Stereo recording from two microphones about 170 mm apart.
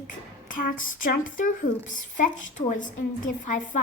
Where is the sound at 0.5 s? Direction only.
55° left (ahead or behind).